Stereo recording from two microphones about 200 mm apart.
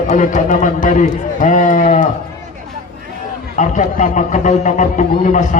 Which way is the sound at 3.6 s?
40° left (ahead or behind).